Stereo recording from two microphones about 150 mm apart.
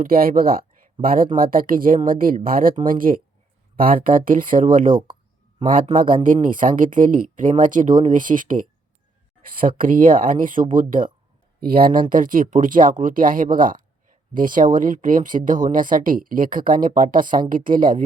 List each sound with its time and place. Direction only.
0.0 s speech: 75° right (ahead or behind)
11.6 s speech: 75° right (ahead or behind)
12.0 s speech: 65° right (ahead or behind)